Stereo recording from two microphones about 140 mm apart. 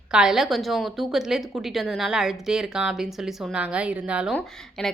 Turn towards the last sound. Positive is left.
turn(degrees=5)  # may be behind; listen again after turning